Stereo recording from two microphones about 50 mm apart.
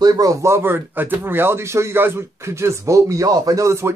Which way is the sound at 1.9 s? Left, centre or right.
Right.